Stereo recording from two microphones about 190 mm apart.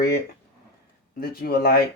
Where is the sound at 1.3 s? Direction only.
50° left (ahead or behind).